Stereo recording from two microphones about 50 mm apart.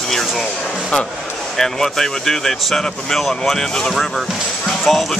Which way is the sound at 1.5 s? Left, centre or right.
Centre.